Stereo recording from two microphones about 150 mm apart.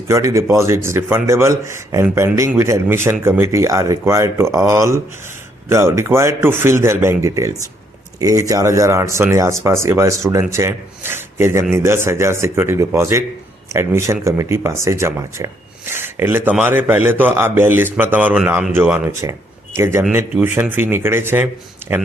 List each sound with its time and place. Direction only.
0.1 s a man's voice: 20° right (ahead or behind)